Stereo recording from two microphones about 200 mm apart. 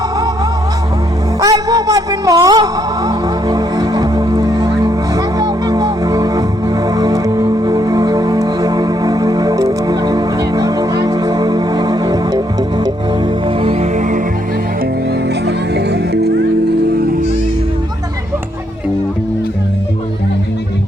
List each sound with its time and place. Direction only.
1.4 s music: 15° right (ahead or behind)
13.6 s music: 30° right (ahead or behind)
15.4 s music: 55° right (ahead or behind)